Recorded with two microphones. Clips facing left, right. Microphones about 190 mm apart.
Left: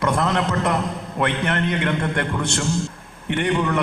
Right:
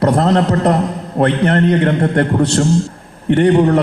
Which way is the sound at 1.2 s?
35° right (ahead or behind).